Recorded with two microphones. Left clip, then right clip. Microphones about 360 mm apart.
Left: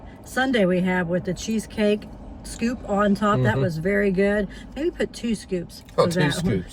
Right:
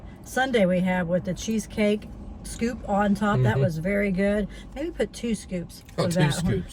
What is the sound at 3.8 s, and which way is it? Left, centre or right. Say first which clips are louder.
Speech: left 6 dB; right.